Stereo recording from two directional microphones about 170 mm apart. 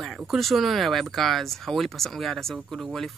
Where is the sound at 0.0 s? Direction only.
Centre (ahead or behind).